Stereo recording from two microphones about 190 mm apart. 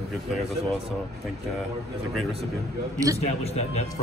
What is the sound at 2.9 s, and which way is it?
Speech, 15° right (ahead or behind).